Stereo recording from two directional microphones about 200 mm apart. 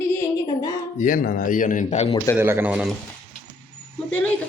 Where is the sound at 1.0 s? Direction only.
40° left (ahead or behind).